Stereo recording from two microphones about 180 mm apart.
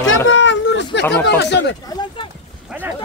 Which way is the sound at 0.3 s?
90° left.